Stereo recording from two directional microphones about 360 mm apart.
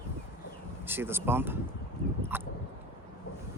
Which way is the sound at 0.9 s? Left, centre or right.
Centre.